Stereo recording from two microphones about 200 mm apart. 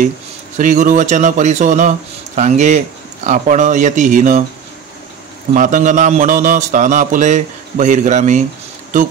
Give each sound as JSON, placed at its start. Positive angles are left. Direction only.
{"t": 0.6, "sound": "a man's voice", "side_deg": -40}
{"t": 5.5, "sound": "a man's voice", "side_deg": -40}